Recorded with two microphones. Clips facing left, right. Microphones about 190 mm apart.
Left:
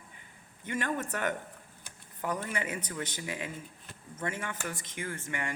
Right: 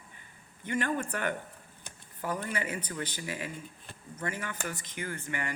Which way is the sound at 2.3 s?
20° left (ahead or behind).